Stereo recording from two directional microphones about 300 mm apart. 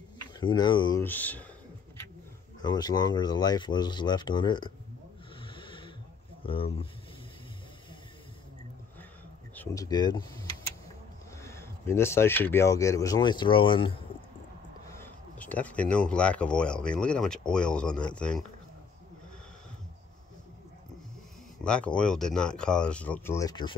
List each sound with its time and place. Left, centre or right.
0.2 s speech: centre
2.6 s speech: centre
5.4 s a sound: centre
6.4 s speech: centre
9.6 s speech: centre
11.4 s a sound: centre
11.9 s speech: centre
15.0 s speech: centre
21.6 s speech: centre